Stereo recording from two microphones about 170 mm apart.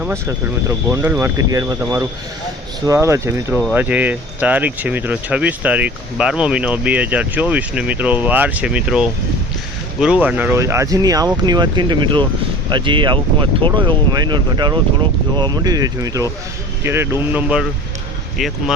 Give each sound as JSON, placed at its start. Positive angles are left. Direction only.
{"t": 0.0, "sound": "speech", "side_deg": -15}
{"t": 3.5, "sound": "speech", "side_deg": 0}
{"t": 3.8, "sound": "speech", "side_deg": -10}